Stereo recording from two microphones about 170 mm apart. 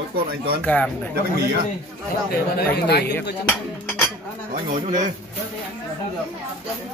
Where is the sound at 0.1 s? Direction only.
60° right (ahead or behind).